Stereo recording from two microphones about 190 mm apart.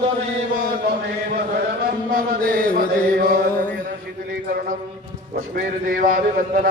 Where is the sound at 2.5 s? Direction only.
45° right (ahead or behind).